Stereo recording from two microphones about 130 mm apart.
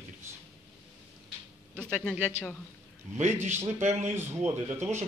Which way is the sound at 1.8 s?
10° left (ahead or behind).